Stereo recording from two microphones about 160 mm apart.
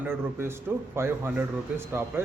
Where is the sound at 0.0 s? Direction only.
15° right (ahead or behind).